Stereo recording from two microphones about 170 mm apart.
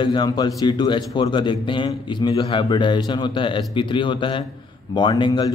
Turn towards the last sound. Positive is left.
turn(degrees=25)  # may be behind; listen again after turning